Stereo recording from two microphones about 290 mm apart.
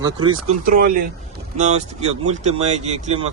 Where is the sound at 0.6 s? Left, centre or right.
Right.